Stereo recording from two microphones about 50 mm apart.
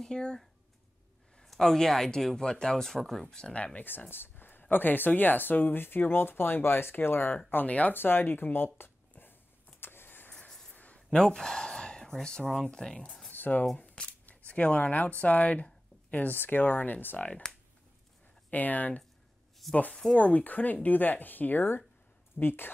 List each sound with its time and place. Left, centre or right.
0.0 s speech: centre
1.4 s speech: centre; by 3.8 s left
4.1 s speech: left
7.3 s speech: left
7.9 s speech: left
9.1 s a sound: left
9.8 s vehicle: left
10.7 s a sound: left
11.0 s speech: centre
13.3 s a sound: left
13.7 s speech: left
16.3 s speech: left
18.5 s speech: left